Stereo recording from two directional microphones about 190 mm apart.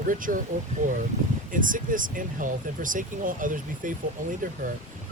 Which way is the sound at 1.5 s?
45° right (ahead or behind).